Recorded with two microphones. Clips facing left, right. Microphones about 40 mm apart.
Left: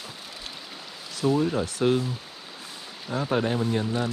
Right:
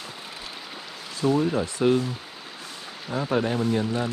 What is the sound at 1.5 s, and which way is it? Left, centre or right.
Speech, right.